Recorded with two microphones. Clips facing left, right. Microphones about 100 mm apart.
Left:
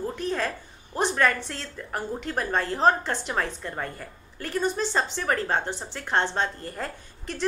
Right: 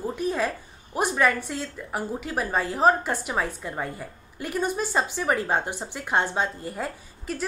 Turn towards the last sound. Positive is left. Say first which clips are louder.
# left 2 dB
turn(degrees=-5)  # may be behind; listen again after turning